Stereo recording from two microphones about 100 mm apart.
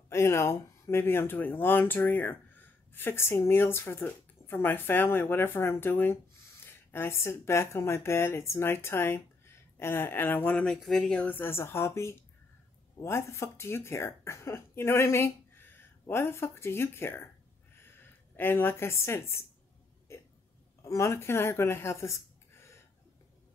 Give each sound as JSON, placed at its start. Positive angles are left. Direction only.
{"t": 0.1, "sound": "speech", "side_deg": 25}
{"t": 20.8, "sound": "speech", "side_deg": 30}